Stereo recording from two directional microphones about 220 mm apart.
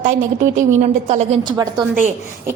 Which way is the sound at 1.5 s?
20° right (ahead or behind).